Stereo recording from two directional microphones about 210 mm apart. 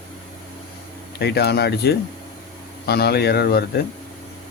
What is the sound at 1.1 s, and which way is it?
Speech, 50° left (ahead or behind).